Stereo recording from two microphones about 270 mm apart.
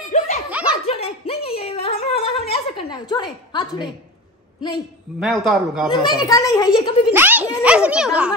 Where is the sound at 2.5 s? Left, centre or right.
Centre.